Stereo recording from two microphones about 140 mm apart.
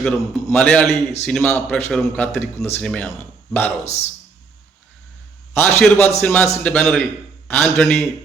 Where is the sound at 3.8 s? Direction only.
50° left (ahead or behind).